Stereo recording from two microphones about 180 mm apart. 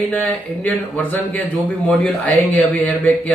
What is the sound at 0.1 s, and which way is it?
Speech, 10° left (ahead or behind).